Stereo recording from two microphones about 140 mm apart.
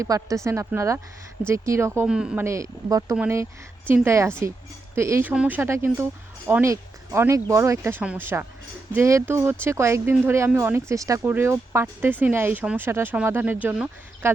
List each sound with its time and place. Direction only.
0.0 s speech: 25° right (ahead or behind)
2.0 s speech: 5° right (ahead or behind)
2.4 s speech: 20° right (ahead or behind)